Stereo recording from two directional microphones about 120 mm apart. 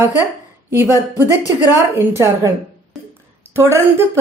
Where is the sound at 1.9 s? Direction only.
20° right (ahead or behind).